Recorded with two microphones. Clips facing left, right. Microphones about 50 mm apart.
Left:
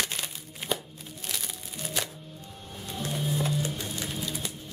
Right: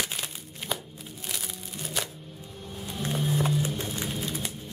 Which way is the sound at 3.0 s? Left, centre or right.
Right.